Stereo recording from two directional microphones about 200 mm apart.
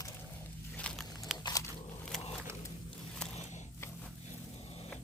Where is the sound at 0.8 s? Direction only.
5° left (ahead or behind).